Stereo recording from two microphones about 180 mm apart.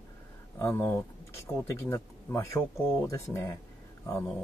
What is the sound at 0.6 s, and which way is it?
Speech, 15° left (ahead or behind).